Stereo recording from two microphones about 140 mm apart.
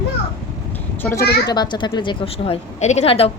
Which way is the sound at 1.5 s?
30° left (ahead or behind).